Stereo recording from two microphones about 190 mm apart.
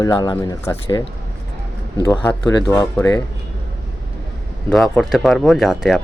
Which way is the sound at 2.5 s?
20° left (ahead or behind).